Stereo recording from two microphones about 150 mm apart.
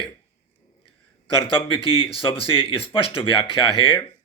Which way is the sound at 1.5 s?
35° left (ahead or behind).